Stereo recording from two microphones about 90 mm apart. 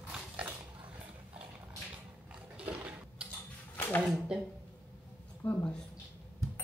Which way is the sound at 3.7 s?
20° left (ahead or behind).